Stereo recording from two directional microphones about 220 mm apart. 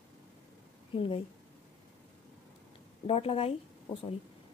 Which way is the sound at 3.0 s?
25° left (ahead or behind).